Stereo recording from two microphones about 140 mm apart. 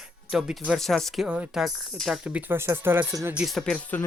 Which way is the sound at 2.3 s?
15° right (ahead or behind).